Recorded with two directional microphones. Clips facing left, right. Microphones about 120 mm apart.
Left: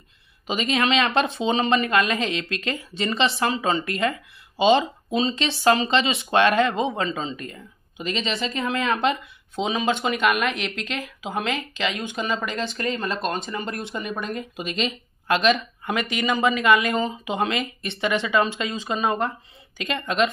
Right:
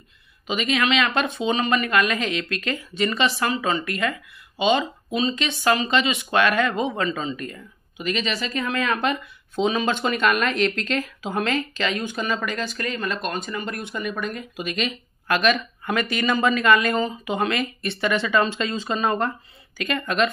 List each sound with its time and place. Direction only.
0.5 s speech: 30° left (ahead or behind)